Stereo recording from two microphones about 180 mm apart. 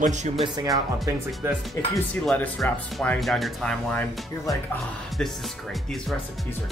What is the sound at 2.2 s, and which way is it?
Speech, 10° left (ahead or behind).